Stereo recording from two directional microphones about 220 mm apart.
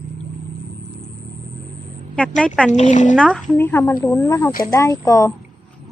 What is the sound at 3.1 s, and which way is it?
Speech, 5° left (ahead or behind).